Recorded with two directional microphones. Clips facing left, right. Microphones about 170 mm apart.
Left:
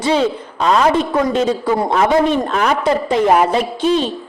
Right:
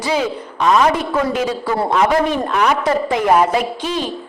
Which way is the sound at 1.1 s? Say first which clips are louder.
Left 3 dB; 25° left (ahead or behind).